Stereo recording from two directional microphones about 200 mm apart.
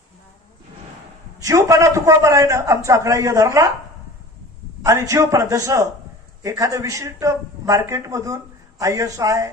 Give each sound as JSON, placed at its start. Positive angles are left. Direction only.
{"t": 1.4, "sound": "a man's voice", "side_deg": -15}
{"t": 4.8, "sound": "a man's voice", "side_deg": -15}